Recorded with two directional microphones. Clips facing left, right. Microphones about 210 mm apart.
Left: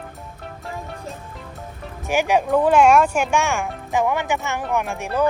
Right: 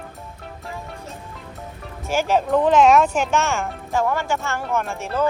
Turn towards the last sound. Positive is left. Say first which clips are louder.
# left 1 dB
turn(degrees=15)  # may be behind; listen again after turning